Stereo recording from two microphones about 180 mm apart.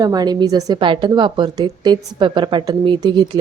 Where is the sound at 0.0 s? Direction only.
20° right (ahead or behind).